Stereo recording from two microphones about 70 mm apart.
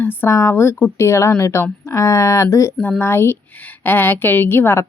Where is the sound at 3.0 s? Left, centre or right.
Left.